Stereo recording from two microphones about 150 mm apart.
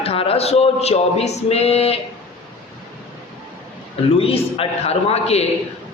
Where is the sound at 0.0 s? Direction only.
40° left (ahead or behind).